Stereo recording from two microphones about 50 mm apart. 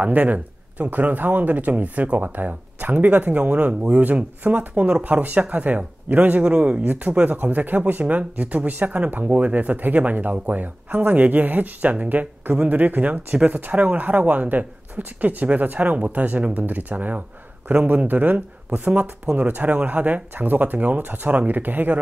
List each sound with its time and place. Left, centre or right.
0.0 s speech: right